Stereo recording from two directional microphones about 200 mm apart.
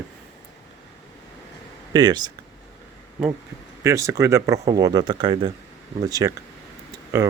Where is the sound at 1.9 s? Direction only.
20° right (ahead or behind).